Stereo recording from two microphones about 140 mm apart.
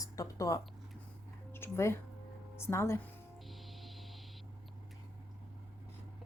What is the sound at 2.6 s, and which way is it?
Speech, 20° left (ahead or behind).